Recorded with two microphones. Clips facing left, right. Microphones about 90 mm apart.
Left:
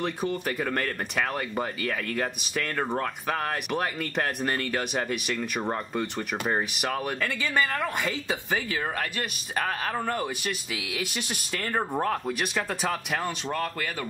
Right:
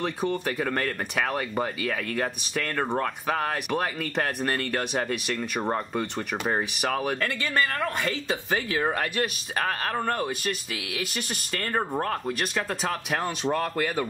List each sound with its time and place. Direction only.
0.0 s speech: centre (ahead or behind)